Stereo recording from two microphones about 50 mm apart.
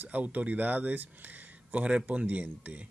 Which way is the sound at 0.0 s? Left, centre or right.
Right.